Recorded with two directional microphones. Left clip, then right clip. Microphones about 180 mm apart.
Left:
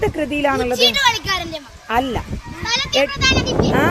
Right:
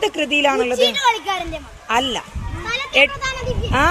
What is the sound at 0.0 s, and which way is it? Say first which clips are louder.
A woman's voice: right 2 dB; 40° left (ahead or behind).